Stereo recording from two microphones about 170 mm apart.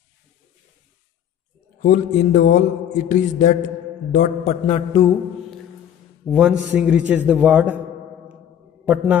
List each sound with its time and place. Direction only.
1.8 s mantra: 50° left (ahead or behind)
4.1 s a man's voice: 40° left (ahead or behind)
6.2 s a man's voice: centre (ahead or behind)
8.8 s a man's voice: 10° right (ahead or behind)